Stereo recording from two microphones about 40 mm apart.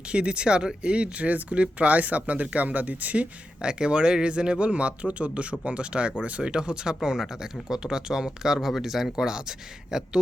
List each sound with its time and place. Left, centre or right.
0.1 s speech: right
3.6 s speech: right; by 9.0 s centre
9.1 s speech: centre